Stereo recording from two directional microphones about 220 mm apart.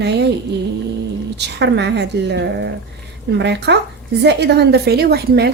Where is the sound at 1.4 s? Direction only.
50° right (ahead or behind).